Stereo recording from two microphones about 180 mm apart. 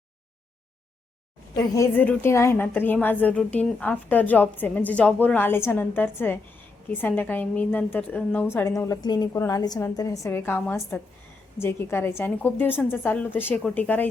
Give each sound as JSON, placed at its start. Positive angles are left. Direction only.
{"t": 1.5, "sound": "a woman's voice", "side_deg": 15}